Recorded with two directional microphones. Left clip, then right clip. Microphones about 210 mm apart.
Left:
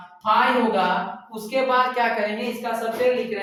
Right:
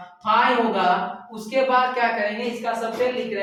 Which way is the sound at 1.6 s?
20° left (ahead or behind).